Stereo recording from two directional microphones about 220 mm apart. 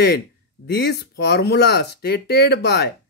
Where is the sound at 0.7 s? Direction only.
50° left (ahead or behind).